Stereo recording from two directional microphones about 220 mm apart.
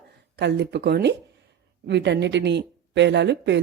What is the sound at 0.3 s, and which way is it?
Speech, 50° right (ahead or behind).